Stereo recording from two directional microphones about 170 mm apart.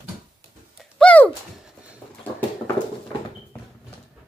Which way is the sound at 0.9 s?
10° left (ahead or behind).